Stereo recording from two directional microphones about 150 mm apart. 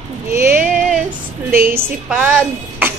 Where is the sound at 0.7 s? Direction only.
Centre (ahead or behind).